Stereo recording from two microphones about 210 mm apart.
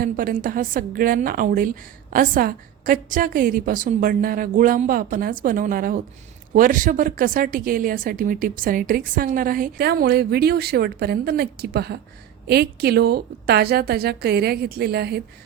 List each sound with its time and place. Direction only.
0.0 s a woman's voice: 40° right (ahead or behind)